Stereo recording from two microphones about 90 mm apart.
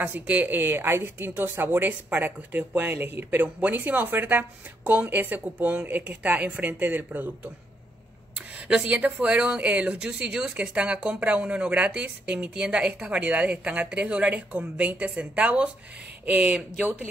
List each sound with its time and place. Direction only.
0.0 s speech: 20° right (ahead or behind)
8.4 s speech: 15° right (ahead or behind)